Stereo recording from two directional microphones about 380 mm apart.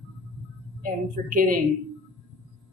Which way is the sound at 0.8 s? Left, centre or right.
Right.